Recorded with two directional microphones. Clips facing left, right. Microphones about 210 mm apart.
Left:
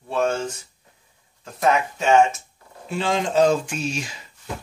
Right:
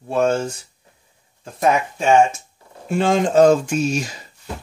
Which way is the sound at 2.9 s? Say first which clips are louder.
Right 6 dB; 50° right (ahead or behind).